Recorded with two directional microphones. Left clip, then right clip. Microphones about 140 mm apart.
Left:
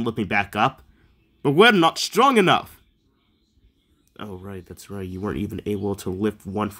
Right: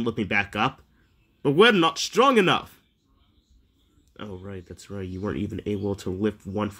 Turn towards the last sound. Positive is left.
turn(degrees=25)  # may be behind; listen again after turning